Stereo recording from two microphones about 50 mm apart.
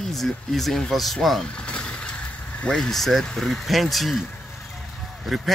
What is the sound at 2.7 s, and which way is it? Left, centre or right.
A man's voice, centre.